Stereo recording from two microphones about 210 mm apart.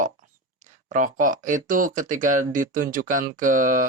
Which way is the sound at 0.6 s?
35° right (ahead or behind).